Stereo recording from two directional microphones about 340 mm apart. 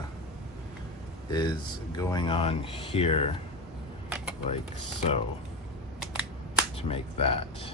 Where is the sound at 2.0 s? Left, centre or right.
Centre.